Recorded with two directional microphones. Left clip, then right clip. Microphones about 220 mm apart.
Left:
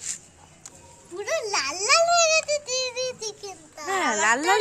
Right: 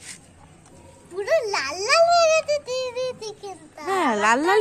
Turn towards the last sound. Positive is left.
turn(degrees=-10)  # may be behind; listen again after turning